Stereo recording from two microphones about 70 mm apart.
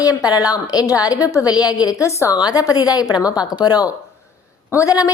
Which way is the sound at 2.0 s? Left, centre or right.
Left.